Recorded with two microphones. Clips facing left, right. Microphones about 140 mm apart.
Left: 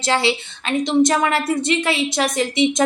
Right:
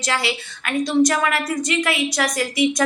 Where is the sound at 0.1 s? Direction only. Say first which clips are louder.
Left 5 dB; 25° left (ahead or behind).